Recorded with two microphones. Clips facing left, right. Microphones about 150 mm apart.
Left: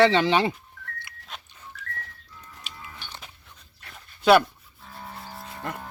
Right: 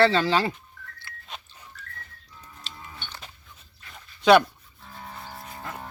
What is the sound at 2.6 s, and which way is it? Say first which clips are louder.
Livestock: right 1 dB; 10° left (ahead or behind).